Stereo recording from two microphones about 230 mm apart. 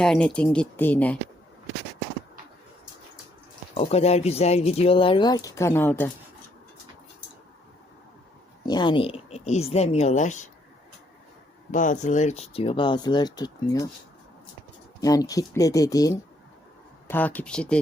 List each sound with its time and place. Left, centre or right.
0.0 s speech: centre
3.8 s speech: left; by 6.1 s centre
8.6 s speech: centre
11.7 s speech: left; by 13.8 s centre
15.0 s speech: centre